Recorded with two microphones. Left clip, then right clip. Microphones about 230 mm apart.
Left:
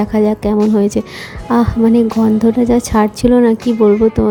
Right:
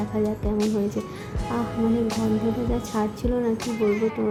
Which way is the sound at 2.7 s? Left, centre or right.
Left.